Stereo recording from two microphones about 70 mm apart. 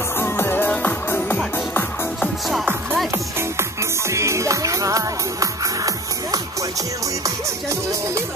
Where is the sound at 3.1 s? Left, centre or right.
Right.